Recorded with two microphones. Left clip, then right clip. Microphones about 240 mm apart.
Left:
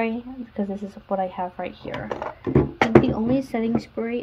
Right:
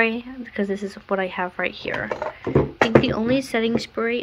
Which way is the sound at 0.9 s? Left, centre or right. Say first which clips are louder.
Right 1 dB; right.